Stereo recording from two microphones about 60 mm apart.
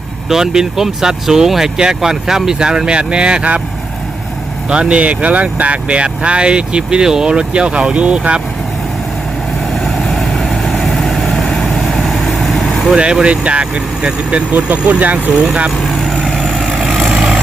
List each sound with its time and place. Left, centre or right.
0.3 s speech: centre
4.7 s speech: centre
9.8 s vehicle: centre
12.9 s speech: centre
16.2 s vehicle: centre